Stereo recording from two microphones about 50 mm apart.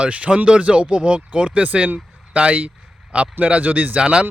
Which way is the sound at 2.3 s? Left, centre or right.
Right.